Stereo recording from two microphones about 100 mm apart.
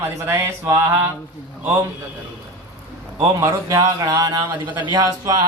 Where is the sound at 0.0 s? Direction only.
25° right (ahead or behind).